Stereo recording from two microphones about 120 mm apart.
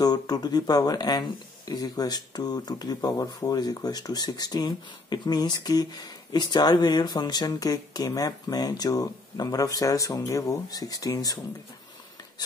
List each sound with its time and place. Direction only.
0.0 s speech: 35° left (ahead or behind)